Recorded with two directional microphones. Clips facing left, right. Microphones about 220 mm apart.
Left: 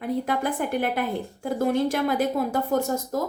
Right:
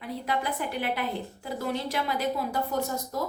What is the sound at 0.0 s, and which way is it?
A woman's voice, 50° left (ahead or behind).